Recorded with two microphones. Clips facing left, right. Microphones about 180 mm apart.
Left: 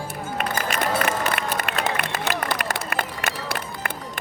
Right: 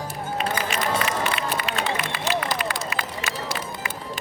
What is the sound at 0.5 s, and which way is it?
Run, 45° left (ahead or behind).